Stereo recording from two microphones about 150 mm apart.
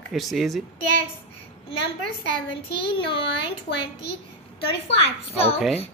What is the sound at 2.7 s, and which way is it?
Speech, 35° left (ahead or behind).